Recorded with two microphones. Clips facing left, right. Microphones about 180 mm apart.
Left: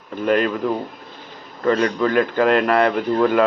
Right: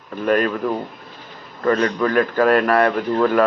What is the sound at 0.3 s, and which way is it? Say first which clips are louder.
Speech: even; 15° left (ahead or behind).